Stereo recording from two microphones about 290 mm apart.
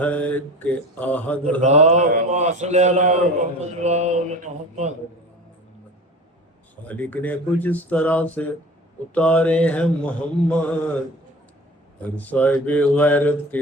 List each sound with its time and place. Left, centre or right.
0.0 s mantra: centre
1.6 s a man's voice: right
6.8 s mantra: centre
12.1 s mantra: centre